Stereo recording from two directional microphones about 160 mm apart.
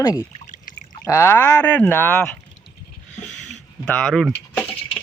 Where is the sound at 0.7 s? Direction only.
55° left (ahead or behind).